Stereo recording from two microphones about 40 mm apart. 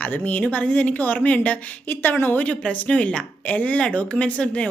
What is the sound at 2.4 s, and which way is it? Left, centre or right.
Speech, left.